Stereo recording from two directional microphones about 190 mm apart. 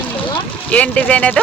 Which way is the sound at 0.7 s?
5° left (ahead or behind).